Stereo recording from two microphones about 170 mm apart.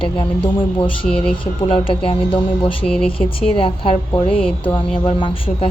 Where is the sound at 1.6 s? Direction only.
35° left (ahead or behind).